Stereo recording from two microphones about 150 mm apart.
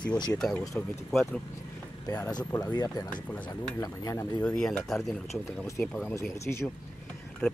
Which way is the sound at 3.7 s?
20° left (ahead or behind).